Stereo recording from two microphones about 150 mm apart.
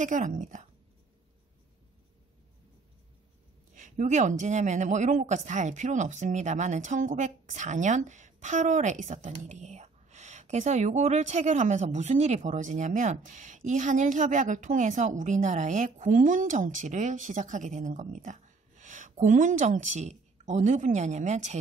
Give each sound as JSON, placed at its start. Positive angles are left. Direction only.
{"t": 0.0, "sound": "speech", "side_deg": -60}
{"t": 3.7, "sound": "speech", "side_deg": -55}